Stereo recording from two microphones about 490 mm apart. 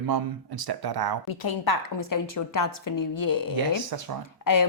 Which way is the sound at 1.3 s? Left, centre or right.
Left.